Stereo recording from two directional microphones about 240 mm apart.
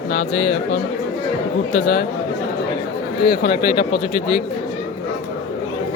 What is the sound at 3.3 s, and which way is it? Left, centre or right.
Speech, left.